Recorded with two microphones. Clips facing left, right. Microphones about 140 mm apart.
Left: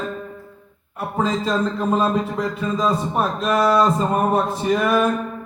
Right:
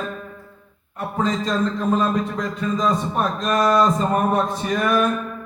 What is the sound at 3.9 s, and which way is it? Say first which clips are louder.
Speech: left 1 dB; 25° left (ahead or behind).